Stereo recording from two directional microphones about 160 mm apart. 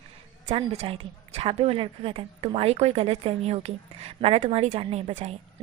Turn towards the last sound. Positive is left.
turn(degrees=-40)  # may be behind; listen again after turning